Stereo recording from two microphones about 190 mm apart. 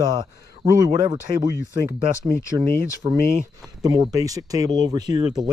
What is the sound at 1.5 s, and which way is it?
Speech, 60° left (ahead or behind).